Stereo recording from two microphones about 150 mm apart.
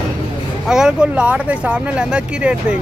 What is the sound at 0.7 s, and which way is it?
Speech, 5° right (ahead or behind).